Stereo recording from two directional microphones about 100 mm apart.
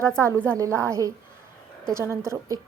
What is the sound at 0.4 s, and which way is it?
A woman's voice, 30° right (ahead or behind).